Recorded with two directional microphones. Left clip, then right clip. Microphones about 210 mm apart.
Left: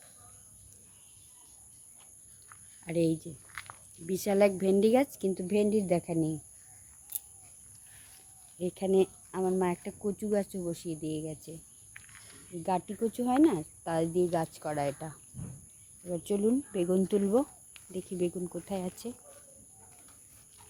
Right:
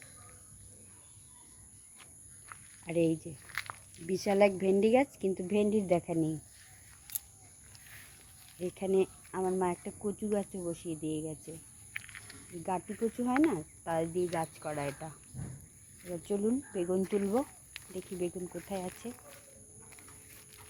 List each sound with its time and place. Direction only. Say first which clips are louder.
2.5 s a sound: right 5 dB; 50° right (ahead or behind)
2.8 s a woman's voice: left 1 dB; 20° left (ahead or behind)
3.4 s a sound: right 5 dB; 60° right (ahead or behind)
4.0 s a woman's voice: left 1 dB; 5° left (ahead or behind)
7.1 s a sound: even; 35° right (ahead or behind)
8.7 s a woman's voice: left 3 dB; 20° left (ahead or behind)
11.9 s snake: right 9 dB; 45° right (ahead or behind)
13.0 s speech: left 3 dB; 25° left (ahead or behind)
16.1 s speech: left 4 dB; 35° left (ahead or behind)